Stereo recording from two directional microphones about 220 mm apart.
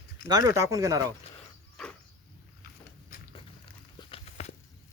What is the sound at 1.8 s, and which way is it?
Vehicle, centre (ahead or behind).